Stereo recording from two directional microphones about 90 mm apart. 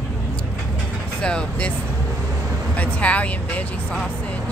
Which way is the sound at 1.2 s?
10° left (ahead or behind).